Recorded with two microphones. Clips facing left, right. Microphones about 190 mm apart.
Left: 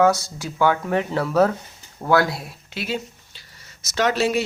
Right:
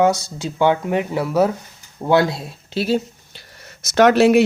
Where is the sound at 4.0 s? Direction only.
60° right (ahead or behind).